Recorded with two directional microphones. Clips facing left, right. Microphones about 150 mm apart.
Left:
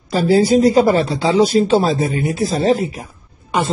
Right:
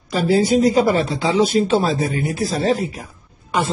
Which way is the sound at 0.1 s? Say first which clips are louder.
Left 3 dB; 30° left (ahead or behind).